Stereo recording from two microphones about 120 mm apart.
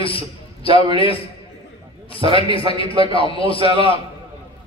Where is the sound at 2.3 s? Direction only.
50° left (ahead or behind).